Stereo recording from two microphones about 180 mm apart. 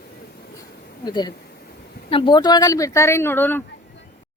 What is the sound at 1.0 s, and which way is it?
Speech, 25° left (ahead or behind).